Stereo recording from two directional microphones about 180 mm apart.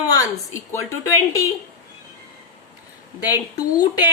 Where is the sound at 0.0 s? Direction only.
20° left (ahead or behind).